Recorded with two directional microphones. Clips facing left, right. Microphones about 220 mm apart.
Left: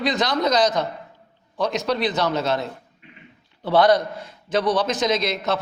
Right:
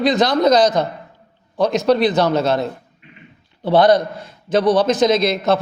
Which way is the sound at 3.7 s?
25° right (ahead or behind).